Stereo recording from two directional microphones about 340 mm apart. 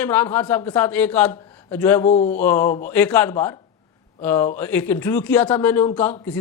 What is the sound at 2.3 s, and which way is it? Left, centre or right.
A woman's voice, centre.